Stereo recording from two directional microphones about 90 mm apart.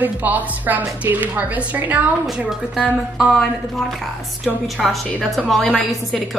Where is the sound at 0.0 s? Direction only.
20° right (ahead or behind).